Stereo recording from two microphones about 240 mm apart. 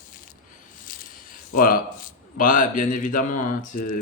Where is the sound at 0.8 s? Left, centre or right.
Left.